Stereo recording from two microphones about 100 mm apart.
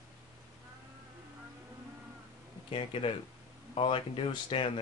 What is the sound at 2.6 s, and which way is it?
Speech, 65° left (ahead or behind).